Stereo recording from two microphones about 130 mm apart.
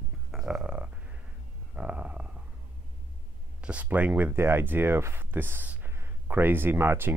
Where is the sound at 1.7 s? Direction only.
10° right (ahead or behind).